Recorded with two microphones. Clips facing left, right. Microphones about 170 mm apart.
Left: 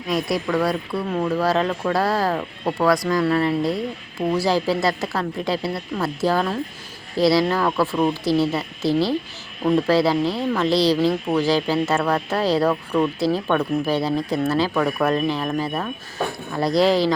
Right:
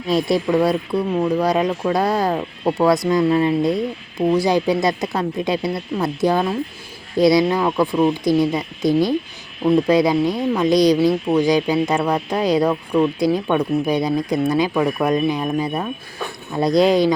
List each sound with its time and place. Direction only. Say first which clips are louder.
0.1 s speech: right 5 dB; 25° right (ahead or behind)